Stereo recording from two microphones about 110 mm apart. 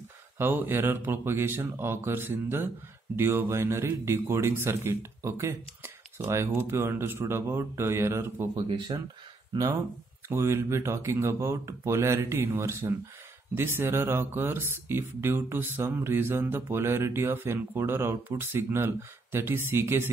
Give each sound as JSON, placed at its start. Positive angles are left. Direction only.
{"t": 0.4, "sound": "speech", "side_deg": -20}
{"t": 8.6, "sound": "speech", "side_deg": -45}
{"t": 10.2, "sound": "speech", "side_deg": -25}